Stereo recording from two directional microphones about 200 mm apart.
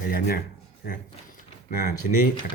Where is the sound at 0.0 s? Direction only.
50° left (ahead or behind).